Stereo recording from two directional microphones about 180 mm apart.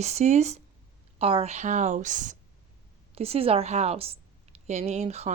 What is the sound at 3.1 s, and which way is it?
Speech, 35° right (ahead or behind).